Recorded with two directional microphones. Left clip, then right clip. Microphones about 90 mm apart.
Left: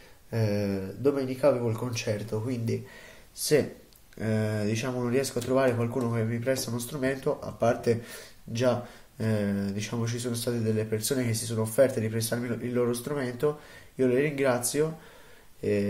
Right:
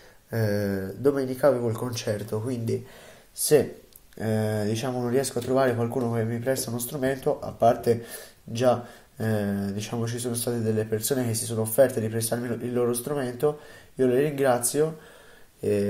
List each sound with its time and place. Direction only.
0.3 s a man's voice: 25° right (ahead or behind)